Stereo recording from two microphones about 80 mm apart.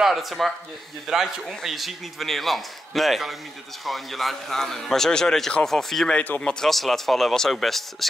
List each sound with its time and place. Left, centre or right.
0.0 s a man's voice: centre
6.1 s speech: centre
6.6 s a man's voice: centre